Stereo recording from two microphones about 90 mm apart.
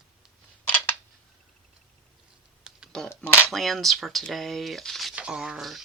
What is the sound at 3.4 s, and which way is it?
Speech, centre (ahead or behind).